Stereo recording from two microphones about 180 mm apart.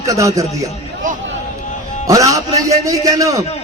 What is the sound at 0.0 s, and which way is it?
Speech, 15° right (ahead or behind).